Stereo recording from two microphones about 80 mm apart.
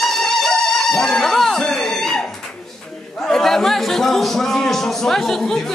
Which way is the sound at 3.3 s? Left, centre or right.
Centre.